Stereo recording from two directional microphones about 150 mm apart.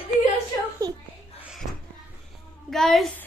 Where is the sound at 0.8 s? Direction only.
20° right (ahead or behind).